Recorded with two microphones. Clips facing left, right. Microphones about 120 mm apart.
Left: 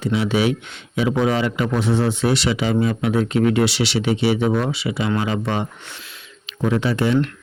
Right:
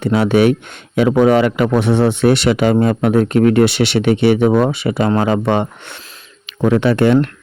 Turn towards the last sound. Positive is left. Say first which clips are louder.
# right 7 dB
turn(degrees=-60)  # may be behind; listen again after turning